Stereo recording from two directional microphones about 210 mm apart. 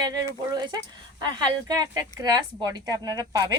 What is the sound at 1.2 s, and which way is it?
A woman's voice, 20° right (ahead or behind).